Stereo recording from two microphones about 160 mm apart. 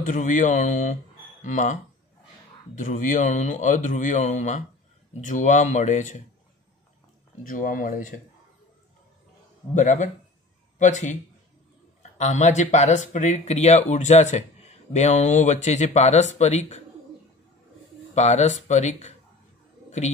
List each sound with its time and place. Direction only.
0.0 s speech: 55° left (ahead or behind)
7.4 s speech: 55° left (ahead or behind)
9.8 s speech: 50° left (ahead or behind)
18.1 s speech: 45° left (ahead or behind)